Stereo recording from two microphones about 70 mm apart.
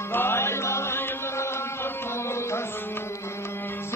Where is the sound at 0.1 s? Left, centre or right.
Left.